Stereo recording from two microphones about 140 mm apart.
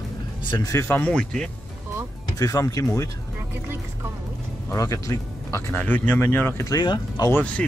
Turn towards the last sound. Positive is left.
turn(degrees=10)  # may be behind; listen again after turning